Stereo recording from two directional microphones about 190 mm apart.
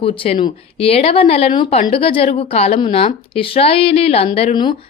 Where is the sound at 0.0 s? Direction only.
30° left (ahead or behind).